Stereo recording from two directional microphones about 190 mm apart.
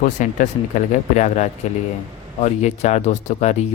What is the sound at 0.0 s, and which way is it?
Speech, 40° left (ahead or behind).